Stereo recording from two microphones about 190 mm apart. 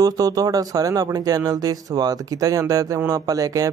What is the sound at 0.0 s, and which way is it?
Speech, 20° right (ahead or behind).